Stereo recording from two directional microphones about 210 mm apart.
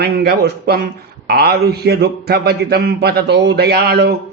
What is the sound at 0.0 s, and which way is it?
Mantra, 50° right (ahead or behind).